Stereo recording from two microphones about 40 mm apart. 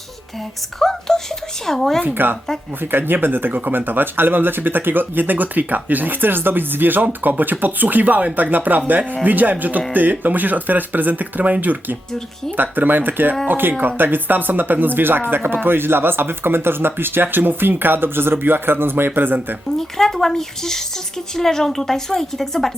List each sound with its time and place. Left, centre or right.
0.8 s speech: centre
2.1 s speech: right
19.8 s a woman's voice: centre